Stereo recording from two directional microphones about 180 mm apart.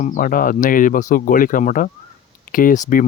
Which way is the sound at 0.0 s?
45° left (ahead or behind).